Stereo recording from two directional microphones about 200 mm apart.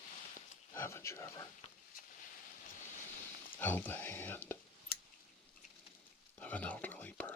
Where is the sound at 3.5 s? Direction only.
10° left (ahead or behind).